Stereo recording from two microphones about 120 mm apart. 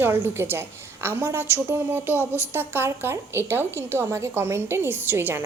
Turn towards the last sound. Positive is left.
turn(degrees=-15)  # may be behind; listen again after turning